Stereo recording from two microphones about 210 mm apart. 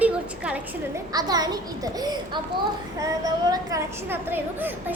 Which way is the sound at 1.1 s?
20° right (ahead or behind).